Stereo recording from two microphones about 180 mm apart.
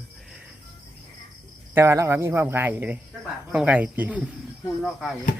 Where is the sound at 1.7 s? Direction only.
15° right (ahead or behind).